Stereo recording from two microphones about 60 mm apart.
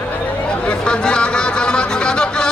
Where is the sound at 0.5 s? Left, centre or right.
Centre.